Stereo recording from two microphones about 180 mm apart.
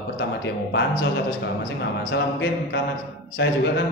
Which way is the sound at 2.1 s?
75° left (ahead or behind).